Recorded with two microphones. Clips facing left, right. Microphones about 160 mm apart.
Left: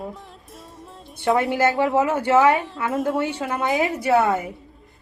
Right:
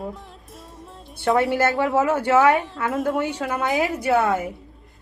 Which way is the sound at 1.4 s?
15° left (ahead or behind).